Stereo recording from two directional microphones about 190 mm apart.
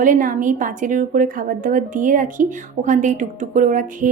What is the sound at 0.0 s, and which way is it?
A woman's voice, 45° right (ahead or behind).